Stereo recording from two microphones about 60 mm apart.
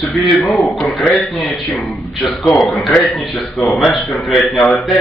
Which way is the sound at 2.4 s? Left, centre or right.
Centre.